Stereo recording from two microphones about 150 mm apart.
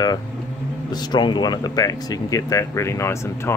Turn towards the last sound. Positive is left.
turn(degrees=15)  # may be behind; listen again after turning